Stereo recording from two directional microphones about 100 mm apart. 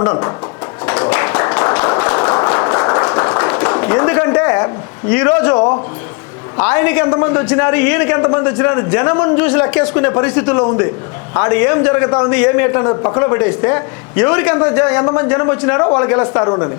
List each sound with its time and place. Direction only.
0.0 s a man's voice: 25° left (ahead or behind)
0.9 s a sound: 20° left (ahead or behind)
6.6 s a man's voice: 20° left (ahead or behind)